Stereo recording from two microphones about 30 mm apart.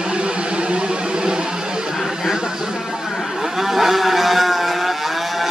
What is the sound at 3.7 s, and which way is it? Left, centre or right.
Vehicle, centre.